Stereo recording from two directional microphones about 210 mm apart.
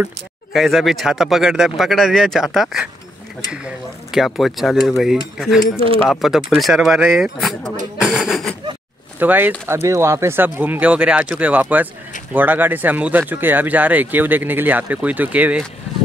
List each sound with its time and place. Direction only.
0.0 s speech: centre (ahead or behind)
8.0 s a sound: centre (ahead or behind)
9.2 s speech: 10° right (ahead or behind)